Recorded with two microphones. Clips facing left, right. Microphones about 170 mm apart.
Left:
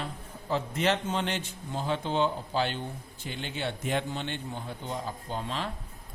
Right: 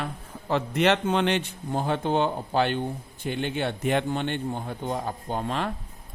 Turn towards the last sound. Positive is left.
turn(degrees=-55)  # may be behind; listen again after turning